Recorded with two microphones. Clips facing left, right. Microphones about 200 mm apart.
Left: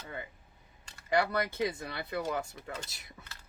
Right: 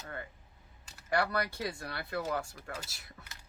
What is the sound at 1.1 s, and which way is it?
Speech, 20° left (ahead or behind).